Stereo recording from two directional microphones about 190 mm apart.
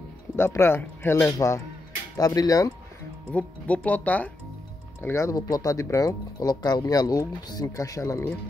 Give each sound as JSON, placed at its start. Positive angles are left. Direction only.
{"t": 0.4, "sound": "speech", "side_deg": 15}
{"t": 3.3, "sound": "speech", "side_deg": 5}